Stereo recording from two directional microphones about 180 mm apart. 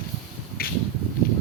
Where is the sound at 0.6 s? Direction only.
55° left (ahead or behind).